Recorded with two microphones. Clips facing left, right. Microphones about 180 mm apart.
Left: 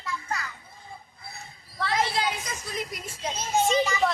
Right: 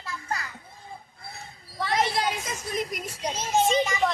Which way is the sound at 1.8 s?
20° right (ahead or behind).